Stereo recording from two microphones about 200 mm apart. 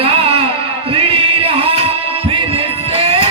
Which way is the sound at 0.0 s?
30° right (ahead or behind).